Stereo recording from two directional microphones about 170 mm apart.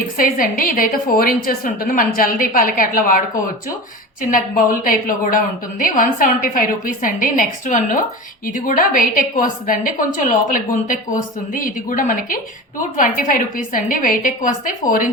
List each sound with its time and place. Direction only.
0.2 s a woman's voice: 55° left (ahead or behind)